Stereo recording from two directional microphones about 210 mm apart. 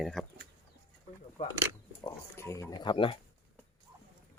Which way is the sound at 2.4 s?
15° left (ahead or behind).